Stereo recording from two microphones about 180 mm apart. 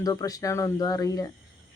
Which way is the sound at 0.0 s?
20° left (ahead or behind).